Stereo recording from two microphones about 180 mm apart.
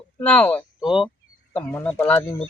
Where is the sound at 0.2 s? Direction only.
10° left (ahead or behind).